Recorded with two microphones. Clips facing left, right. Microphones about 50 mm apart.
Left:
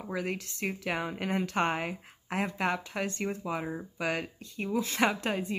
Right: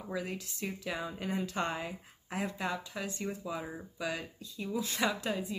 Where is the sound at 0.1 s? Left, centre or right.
Left.